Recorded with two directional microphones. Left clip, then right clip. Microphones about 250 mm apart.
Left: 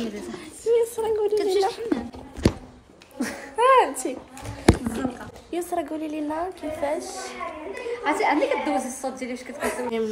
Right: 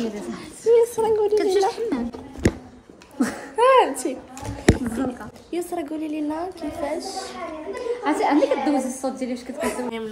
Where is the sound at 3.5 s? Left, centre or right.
Centre.